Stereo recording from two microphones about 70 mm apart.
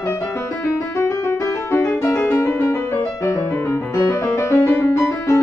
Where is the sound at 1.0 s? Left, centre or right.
Left.